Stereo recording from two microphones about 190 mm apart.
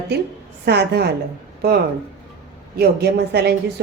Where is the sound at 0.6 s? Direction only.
60° right (ahead or behind).